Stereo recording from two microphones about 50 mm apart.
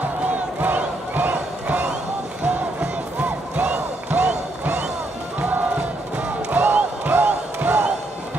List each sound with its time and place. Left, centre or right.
0.6 s crowd: right
2.4 s music: right
6.5 s crowd: right